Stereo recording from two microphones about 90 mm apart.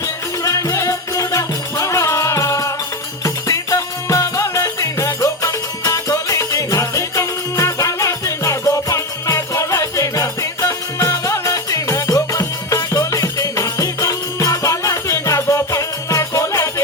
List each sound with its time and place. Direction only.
0.4 s music: 35° left (ahead or behind)